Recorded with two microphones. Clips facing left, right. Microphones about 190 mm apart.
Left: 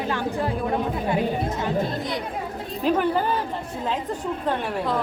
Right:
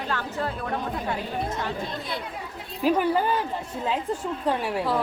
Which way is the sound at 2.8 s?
10° right (ahead or behind).